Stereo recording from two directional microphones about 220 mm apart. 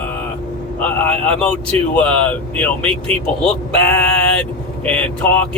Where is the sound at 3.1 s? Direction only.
30° right (ahead or behind).